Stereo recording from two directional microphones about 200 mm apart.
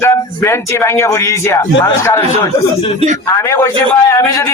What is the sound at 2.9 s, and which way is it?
Speech, 35° right (ahead or behind).